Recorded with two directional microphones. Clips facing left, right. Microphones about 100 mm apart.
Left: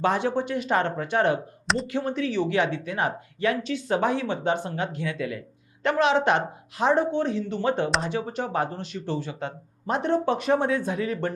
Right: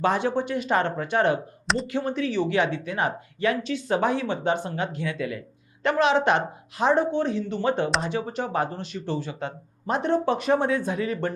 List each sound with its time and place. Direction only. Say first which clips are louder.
0.0 s speech: even; 20° right (ahead or behind)
1.6 s a sound: even; centre (ahead or behind)
2.0 s speech: right 1 dB; 15° right (ahead or behind)